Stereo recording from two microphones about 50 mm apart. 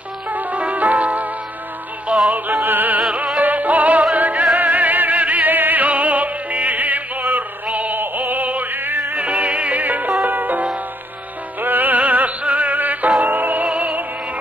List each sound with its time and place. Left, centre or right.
0.3 s music: right
9.2 s music: right
13.7 s opera: right